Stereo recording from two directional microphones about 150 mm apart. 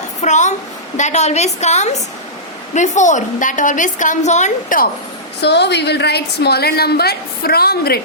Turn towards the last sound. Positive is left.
turn(degrees=90)